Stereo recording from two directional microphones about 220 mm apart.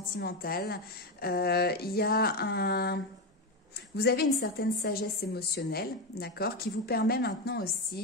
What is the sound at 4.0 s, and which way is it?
A woman's voice, 45° left (ahead or behind).